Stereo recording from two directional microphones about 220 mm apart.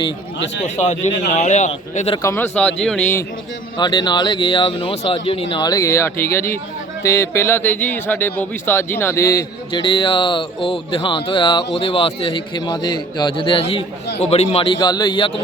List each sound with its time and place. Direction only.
0.6 s a man's voice: 30° left (ahead or behind)
2.2 s speech: 10° left (ahead or behind)
3.8 s speech: 20° left (ahead or behind)